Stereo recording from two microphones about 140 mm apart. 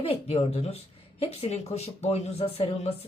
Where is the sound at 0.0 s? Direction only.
45° left (ahead or behind).